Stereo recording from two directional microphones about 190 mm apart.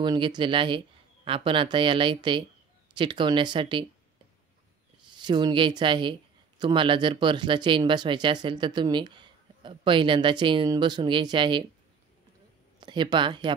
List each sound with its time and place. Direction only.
0.0 s speech: 25° right (ahead or behind)
5.1 s speech: 25° right (ahead or behind)
12.8 s speech: 25° right (ahead or behind)